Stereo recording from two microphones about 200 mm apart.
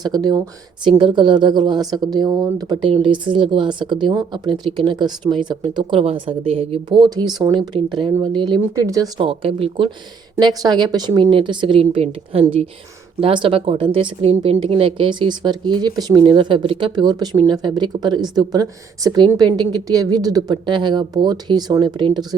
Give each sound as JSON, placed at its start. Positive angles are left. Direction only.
{"t": 0.0, "sound": "speech", "side_deg": -20}
{"t": 9.1, "sound": "speech", "side_deg": -25}